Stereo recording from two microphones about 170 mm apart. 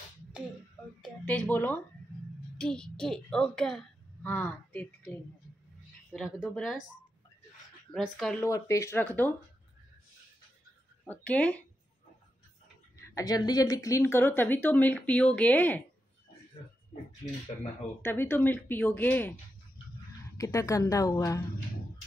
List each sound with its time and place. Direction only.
1.2 s a woman's voice: 10° left (ahead or behind)
7.9 s speech: centre (ahead or behind)
8.4 s a woman's voice: 15° left (ahead or behind)
11.1 s a woman's voice: 5° left (ahead or behind)
12.9 s a woman's voice: 20° left (ahead or behind)
18.0 s a woman's voice: 15° left (ahead or behind)
20.3 s a woman's voice: 20° left (ahead or behind)